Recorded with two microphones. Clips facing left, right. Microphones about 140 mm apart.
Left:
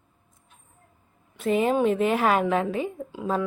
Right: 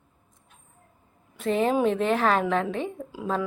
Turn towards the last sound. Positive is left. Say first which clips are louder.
# left 1 dB
turn(degrees=0)  # may be behind; listen again after turning